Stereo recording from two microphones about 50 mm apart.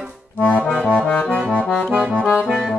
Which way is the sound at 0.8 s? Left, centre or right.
Left.